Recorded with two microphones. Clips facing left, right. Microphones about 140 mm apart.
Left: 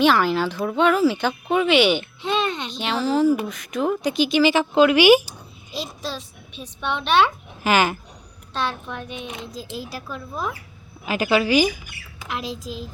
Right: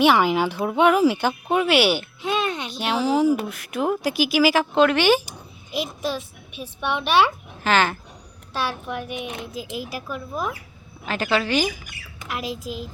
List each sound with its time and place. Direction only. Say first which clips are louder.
0.0 s speech: right 1 dB; 15° right (ahead or behind); by 5.2 s 10° left (ahead or behind)
5.7 s a child's voice: right 4 dB; 55° right (ahead or behind)
6.1 s speech: right 4 dB; 10° right (ahead or behind)
7.6 s a woman's voice: left 1 dB; 10° left (ahead or behind)
8.5 s speech: even; 10° right (ahead or behind)
11.0 s a woman's voice: left 3 dB; 10° left (ahead or behind)
12.3 s speech: even; 5° right (ahead or behind)
12.5 s speech: right 1 dB; 50° right (ahead or behind)